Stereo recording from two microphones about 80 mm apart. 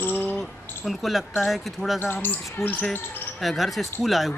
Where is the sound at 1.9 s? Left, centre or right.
Left.